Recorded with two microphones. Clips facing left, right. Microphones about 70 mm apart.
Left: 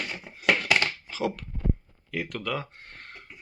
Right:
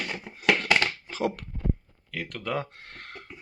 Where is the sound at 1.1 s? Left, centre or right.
Right.